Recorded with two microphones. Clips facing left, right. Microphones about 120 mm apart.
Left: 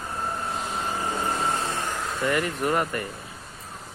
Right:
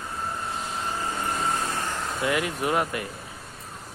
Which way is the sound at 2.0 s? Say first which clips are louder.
Left 1 dB; 5° right (ahead or behind).